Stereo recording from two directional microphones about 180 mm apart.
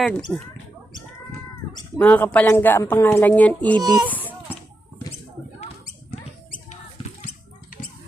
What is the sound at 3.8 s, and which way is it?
Speech, 20° right (ahead or behind).